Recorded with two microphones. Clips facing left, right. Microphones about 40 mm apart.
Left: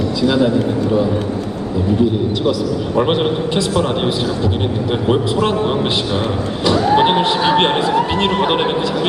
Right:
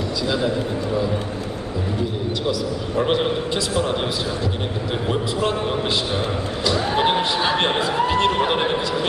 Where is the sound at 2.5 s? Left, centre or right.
Left.